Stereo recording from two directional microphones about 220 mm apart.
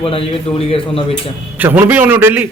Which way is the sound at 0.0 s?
25° left (ahead or behind).